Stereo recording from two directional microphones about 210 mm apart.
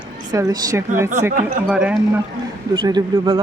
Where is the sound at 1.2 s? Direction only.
5° right (ahead or behind).